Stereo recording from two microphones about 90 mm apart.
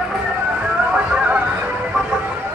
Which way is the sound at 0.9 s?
15° right (ahead or behind).